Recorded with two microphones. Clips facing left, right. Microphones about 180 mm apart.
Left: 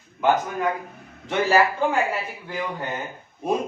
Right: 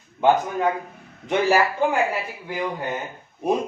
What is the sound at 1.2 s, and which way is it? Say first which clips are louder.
Speech: even; 15° right (ahead or behind).